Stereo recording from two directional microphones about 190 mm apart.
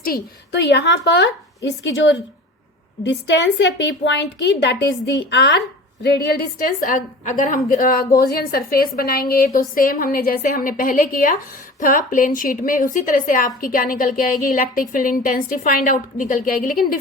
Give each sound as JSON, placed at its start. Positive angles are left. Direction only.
{"t": 0.0, "sound": "a woman's voice", "side_deg": 55}